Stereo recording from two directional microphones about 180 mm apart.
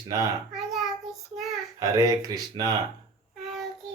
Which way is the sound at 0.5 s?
Centre (ahead or behind).